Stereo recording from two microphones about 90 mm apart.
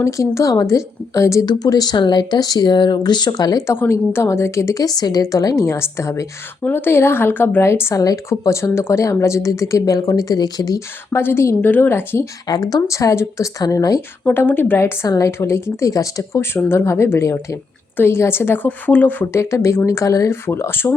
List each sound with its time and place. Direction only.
0.0 s speech: 35° left (ahead or behind)
1.5 s speech: 45° left (ahead or behind)
3.7 s speech: 30° left (ahead or behind)
4.8 s speech: 45° left (ahead or behind)
6.6 s speech: 20° left (ahead or behind); by 10.8 s 50° left (ahead or behind)
10.8 s speech: 25° left (ahead or behind)
12.5 s speech: 45° left (ahead or behind)
14.3 s speech: 20° left (ahead or behind)
15.0 s speech: 40° left (ahead or behind)
15.3 s speech: 30° left (ahead or behind)
19.3 s speech: 30° left (ahead or behind)